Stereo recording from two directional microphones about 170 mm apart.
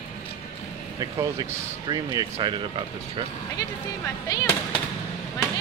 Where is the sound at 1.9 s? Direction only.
25° right (ahead or behind).